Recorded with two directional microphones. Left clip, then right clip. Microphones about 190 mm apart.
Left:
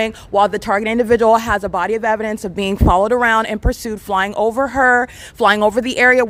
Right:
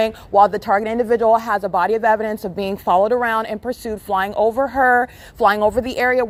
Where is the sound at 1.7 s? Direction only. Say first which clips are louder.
Right 5 dB; 20° left (ahead or behind); by 6.2 s 35° left (ahead or behind).